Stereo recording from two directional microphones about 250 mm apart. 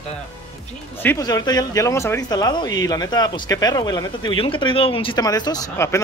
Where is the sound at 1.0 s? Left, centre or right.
Centre.